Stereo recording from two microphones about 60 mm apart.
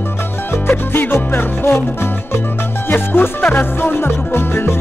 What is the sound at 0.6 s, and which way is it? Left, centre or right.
Music, left.